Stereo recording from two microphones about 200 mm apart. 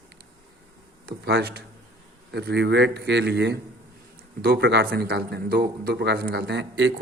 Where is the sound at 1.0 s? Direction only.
50° right (ahead or behind).